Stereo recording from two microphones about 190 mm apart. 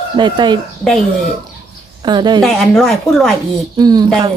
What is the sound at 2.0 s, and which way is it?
Speech, 20° right (ahead or behind).